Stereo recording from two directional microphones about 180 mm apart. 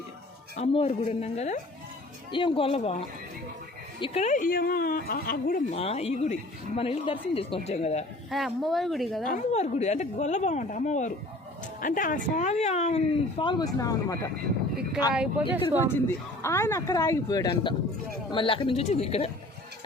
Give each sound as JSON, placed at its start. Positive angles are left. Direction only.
{"t": 0.5, "sound": "a woman's voice", "side_deg": 35}
{"t": 4.0, "sound": "speech", "side_deg": 35}
{"t": 5.7, "sound": "a woman's voice", "side_deg": 35}
{"t": 8.3, "sound": "speech", "side_deg": 0}
{"t": 9.2, "sound": "a woman's voice", "side_deg": 45}
{"t": 13.4, "sound": "speech", "side_deg": 25}
{"t": 15.1, "sound": "speech", "side_deg": -5}
{"t": 15.9, "sound": "a woman's voice", "side_deg": 15}